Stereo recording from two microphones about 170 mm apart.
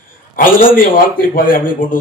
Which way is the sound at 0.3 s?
55° left (ahead or behind).